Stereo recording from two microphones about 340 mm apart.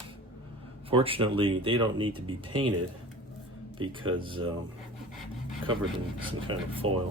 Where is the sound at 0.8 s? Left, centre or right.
Centre.